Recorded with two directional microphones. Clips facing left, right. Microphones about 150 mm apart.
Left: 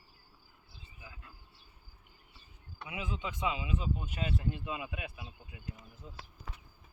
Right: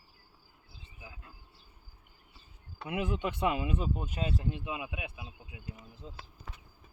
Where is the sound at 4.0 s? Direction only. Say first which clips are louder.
Right 3 dB; 35° right (ahead or behind).